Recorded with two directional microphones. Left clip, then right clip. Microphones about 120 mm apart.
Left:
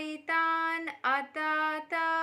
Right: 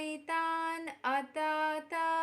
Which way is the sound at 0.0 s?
15° right (ahead or behind).